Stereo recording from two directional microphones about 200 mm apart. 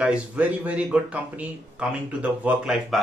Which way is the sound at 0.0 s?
5° right (ahead or behind).